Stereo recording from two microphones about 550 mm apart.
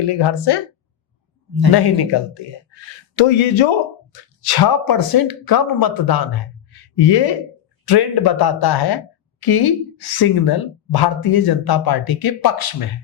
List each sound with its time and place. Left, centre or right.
0.0 s speech: left
1.7 s speech: left
3.2 s speech: left